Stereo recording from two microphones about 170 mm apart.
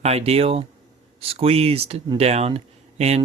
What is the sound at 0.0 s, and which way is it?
Speech, 35° right (ahead or behind).